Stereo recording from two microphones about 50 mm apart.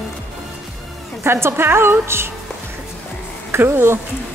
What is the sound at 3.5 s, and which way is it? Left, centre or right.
Speech, right.